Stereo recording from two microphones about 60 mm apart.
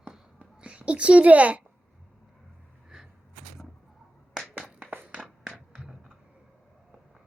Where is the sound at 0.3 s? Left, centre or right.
Right.